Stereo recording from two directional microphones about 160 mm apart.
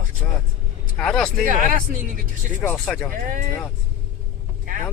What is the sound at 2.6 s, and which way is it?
Speech, 10° left (ahead or behind).